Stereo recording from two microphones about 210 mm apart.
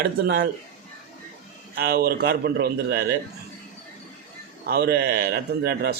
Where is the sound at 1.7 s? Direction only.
45° right (ahead or behind).